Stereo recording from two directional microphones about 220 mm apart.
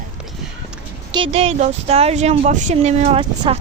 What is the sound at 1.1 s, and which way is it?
Speech, 25° right (ahead or behind).